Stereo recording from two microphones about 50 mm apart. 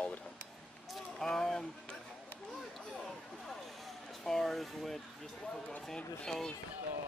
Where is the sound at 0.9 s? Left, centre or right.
Centre.